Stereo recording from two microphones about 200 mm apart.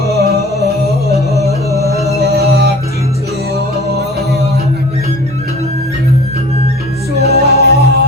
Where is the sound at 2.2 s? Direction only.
50° right (ahead or behind).